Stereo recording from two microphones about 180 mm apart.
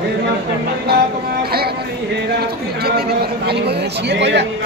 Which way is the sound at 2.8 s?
60° right (ahead or behind).